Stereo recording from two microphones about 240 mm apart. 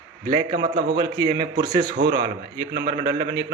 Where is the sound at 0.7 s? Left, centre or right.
Right.